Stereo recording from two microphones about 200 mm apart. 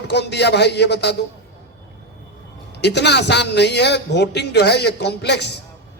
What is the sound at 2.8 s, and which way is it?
A man's voice, 60° left (ahead or behind).